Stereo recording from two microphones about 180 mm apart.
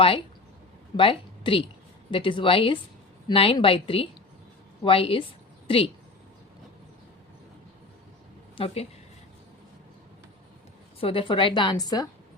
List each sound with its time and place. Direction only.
0.0 s a woman's voice: 30° left (ahead or behind)
8.5 s a woman's voice: 35° left (ahead or behind)
11.0 s a woman's voice: 30° left (ahead or behind)